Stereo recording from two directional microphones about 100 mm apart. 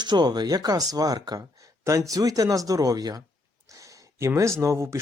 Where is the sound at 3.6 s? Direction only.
35° right (ahead or behind).